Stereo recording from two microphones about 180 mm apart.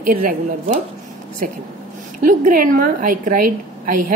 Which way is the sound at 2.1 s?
50° right (ahead or behind).